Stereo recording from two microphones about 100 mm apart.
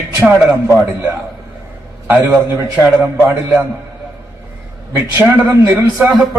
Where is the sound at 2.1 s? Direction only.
25° right (ahead or behind).